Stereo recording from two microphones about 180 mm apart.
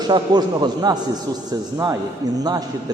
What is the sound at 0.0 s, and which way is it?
A man's voice, 25° right (ahead or behind).